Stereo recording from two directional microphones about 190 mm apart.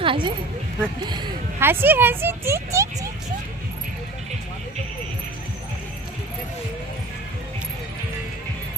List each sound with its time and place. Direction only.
0.0 s speech: 25° right (ahead or behind)
1.6 s speech: 10° right (ahead or behind)